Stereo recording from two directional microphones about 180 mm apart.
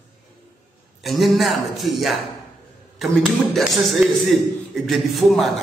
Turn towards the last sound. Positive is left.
turn(degrees=0)  # may be behind; listen again after turning